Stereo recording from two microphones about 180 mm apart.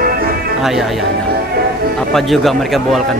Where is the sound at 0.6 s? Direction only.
Centre (ahead or behind).